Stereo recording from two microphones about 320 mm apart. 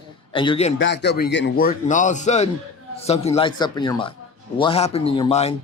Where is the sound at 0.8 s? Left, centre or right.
Left.